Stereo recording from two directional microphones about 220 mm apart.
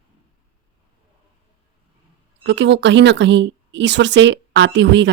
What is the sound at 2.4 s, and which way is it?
Speech, 55° right (ahead or behind).